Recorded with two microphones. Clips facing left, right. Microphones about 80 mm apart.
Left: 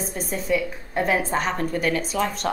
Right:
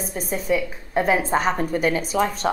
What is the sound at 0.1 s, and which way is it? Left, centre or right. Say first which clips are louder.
Speech: right 2 dB; centre.